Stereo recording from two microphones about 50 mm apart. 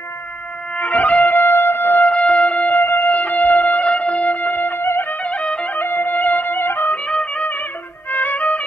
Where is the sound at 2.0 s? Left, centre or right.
Centre.